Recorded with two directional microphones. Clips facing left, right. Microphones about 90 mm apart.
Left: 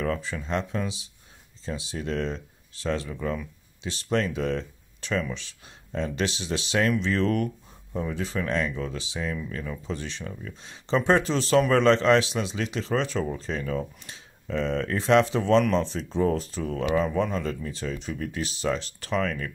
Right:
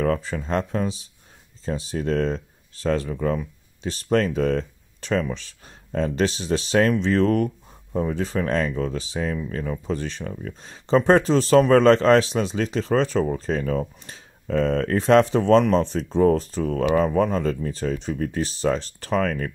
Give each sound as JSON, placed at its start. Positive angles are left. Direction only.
{"t": 0.0, "sound": "speech", "side_deg": -40}